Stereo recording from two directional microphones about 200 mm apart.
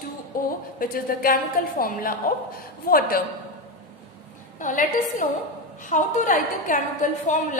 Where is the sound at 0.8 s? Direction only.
45° left (ahead or behind).